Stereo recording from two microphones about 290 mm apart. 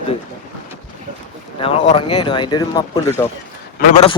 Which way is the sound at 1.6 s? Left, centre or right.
Centre.